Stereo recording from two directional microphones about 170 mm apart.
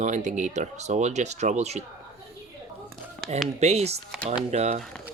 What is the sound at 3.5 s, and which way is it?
Speech, 40° right (ahead or behind).